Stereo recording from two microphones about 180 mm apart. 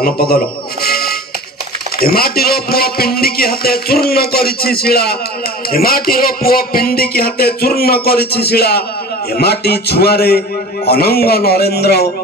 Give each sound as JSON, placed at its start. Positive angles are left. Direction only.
{"t": 0.0, "sound": "a man's voice", "side_deg": 55}
{"t": 0.8, "sound": "music", "side_deg": 60}
{"t": 2.0, "sound": "a man's voice", "side_deg": 55}